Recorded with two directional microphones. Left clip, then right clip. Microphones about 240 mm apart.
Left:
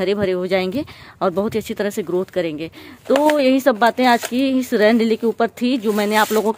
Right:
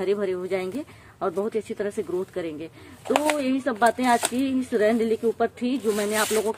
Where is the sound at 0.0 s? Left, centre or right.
Left.